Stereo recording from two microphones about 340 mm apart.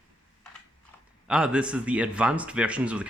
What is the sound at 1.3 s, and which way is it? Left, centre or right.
Speech, centre.